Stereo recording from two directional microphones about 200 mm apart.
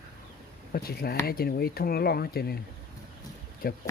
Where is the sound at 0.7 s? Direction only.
50° left (ahead or behind).